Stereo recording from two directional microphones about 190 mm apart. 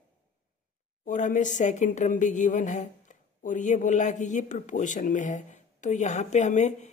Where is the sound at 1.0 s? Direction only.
40° left (ahead or behind).